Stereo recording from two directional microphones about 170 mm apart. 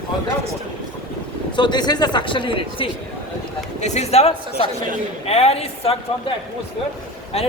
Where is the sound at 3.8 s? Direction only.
40° left (ahead or behind).